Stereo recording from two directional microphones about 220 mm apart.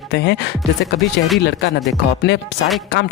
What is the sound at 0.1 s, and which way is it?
Speech, 50° left (ahead or behind).